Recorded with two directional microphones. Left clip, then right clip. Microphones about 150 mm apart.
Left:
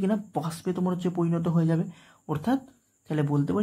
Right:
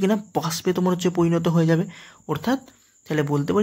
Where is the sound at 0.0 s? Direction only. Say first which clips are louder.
Right 6 dB; 15° right (ahead or behind).